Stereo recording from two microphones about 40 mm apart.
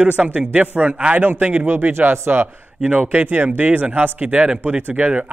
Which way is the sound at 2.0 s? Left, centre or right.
Right.